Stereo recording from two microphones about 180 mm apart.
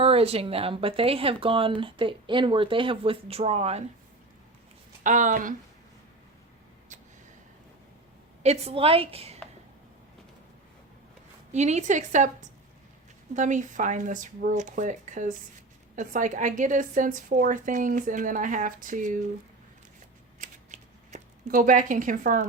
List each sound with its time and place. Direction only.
0.0 s speech: 35° right (ahead or behind)
5.0 s a woman's voice: 45° right (ahead or behind)
8.4 s speech: 35° right (ahead or behind)
11.5 s a woman's voice: 40° right (ahead or behind)
20.4 s scissors: 45° right (ahead or behind)